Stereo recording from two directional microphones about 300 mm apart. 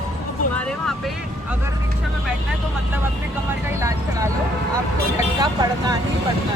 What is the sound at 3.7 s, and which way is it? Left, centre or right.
Vehicle, centre.